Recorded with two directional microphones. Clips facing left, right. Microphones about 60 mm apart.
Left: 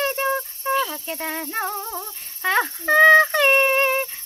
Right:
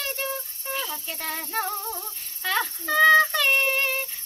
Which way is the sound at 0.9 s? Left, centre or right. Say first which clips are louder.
Left 4 dB; centre.